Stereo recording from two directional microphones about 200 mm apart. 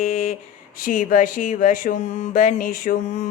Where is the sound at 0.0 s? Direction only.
35° left (ahead or behind).